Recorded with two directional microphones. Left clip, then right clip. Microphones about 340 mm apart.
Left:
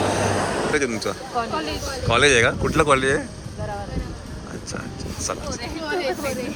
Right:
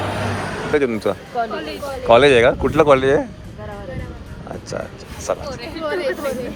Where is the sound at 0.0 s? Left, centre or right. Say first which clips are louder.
Left 2 dB; left.